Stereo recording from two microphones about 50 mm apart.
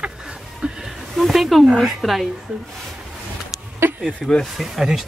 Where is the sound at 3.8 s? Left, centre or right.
Right.